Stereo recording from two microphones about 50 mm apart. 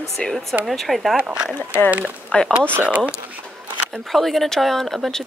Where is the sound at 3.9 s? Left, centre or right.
Centre.